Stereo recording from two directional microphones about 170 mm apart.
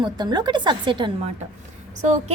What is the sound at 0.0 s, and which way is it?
A woman's voice, 25° right (ahead or behind).